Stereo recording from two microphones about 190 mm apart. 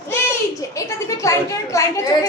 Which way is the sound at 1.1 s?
15° left (ahead or behind).